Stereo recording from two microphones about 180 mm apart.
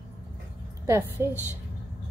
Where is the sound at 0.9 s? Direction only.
15° right (ahead or behind).